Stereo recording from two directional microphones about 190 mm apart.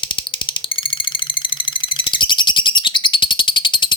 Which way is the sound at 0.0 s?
25° left (ahead or behind).